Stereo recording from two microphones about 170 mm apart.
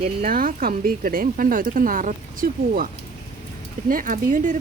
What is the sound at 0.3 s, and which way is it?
Speech, 60° right (ahead or behind).